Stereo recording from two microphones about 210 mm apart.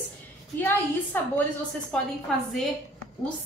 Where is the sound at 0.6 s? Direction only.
10° left (ahead or behind).